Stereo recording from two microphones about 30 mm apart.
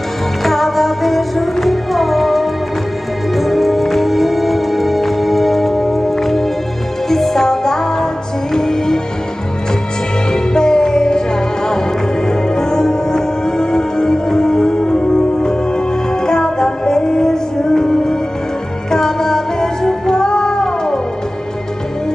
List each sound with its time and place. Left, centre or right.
0.4 s music: centre
10.3 s music: left